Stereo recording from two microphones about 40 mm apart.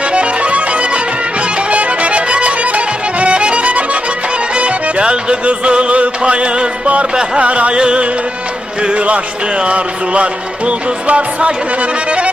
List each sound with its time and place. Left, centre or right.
0.1 s music: right